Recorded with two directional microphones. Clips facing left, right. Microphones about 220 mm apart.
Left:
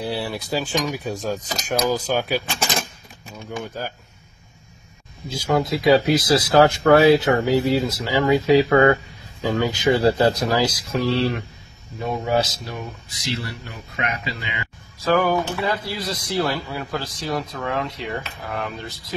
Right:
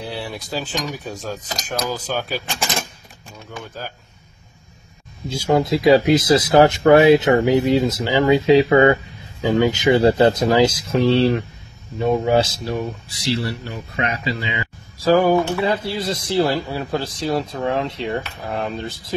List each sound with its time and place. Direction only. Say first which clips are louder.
0.0 s speech: left 3 dB; 5° left (ahead or behind)
5.3 s speech: right 3 dB; 25° right (ahead or behind)
9.4 s speech: right 4 dB; 15° right (ahead or behind)